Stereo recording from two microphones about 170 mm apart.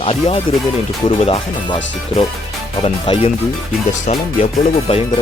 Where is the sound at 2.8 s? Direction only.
35° left (ahead or behind).